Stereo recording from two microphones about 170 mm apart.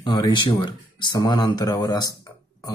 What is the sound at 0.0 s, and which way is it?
Speech, 30° left (ahead or behind).